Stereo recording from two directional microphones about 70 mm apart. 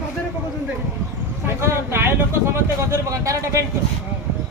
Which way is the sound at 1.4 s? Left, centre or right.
Right.